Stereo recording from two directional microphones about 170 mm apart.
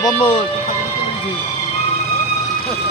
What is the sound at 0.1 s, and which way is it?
Speech, 35° left (ahead or behind).